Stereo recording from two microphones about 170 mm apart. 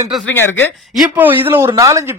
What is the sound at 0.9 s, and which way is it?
Speech, 10° right (ahead or behind).